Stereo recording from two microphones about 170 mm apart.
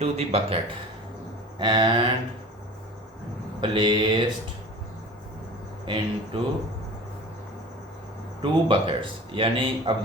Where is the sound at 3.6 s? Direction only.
30° right (ahead or behind).